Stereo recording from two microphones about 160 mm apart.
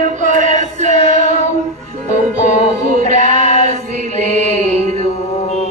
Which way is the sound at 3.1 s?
50° right (ahead or behind).